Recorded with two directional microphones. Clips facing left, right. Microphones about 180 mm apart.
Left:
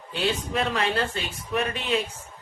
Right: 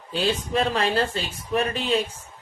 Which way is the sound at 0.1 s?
35° right (ahead or behind).